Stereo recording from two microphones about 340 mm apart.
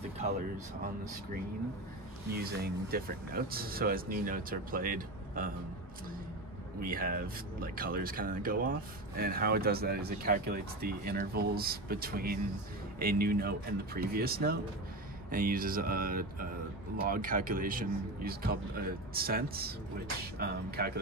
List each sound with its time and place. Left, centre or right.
2.4 s speech: right
6.8 s speech: right